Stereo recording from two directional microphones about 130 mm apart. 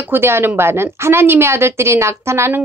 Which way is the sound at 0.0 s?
15° right (ahead or behind).